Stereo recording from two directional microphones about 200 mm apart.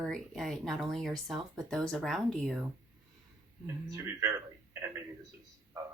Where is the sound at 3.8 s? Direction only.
15° right (ahead or behind).